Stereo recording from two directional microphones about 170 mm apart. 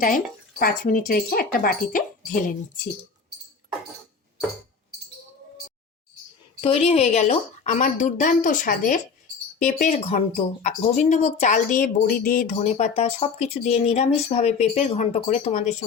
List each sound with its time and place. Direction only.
0.6 s speech: 55° left (ahead or behind)
6.6 s speech: 35° left (ahead or behind); by 12.5 s 55° left (ahead or behind)
12.5 s speech: 40° left (ahead or behind)